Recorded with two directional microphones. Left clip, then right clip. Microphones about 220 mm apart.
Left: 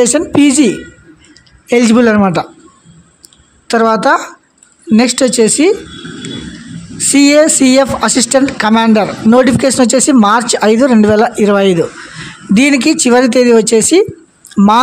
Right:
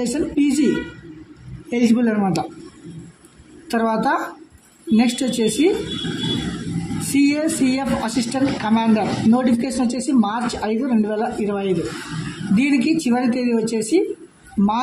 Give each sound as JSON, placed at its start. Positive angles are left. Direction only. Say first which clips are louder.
{"t": 0.0, "sound": "speech", "louder": "left 11 dB", "side_deg": 45}
{"t": 1.7, "sound": "speech", "louder": "left 11 dB", "side_deg": 45}
{"t": 3.6, "sound": "speech", "louder": "left 10 dB", "side_deg": 45}
{"t": 7.2, "sound": "speech", "louder": "left 12 dB", "side_deg": 50}